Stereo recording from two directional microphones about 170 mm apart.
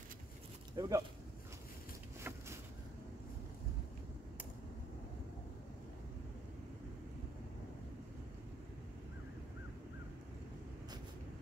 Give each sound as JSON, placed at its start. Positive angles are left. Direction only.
{"t": 0.7, "sound": "speech", "side_deg": -20}
{"t": 2.2, "sound": "vehicle", "side_deg": -15}